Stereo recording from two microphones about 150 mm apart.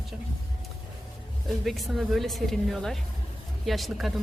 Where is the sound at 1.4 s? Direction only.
Centre (ahead or behind).